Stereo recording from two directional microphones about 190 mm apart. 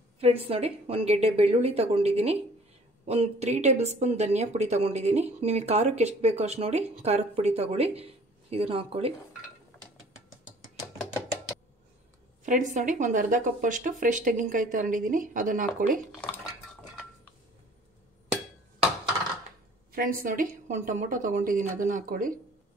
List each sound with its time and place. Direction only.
0.2 s a woman's voice: 30° right (ahead or behind)
12.4 s speech: 40° right (ahead or behind)
19.9 s speech: 50° right (ahead or behind)